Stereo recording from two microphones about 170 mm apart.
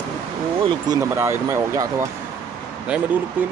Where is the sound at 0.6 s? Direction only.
20° right (ahead or behind).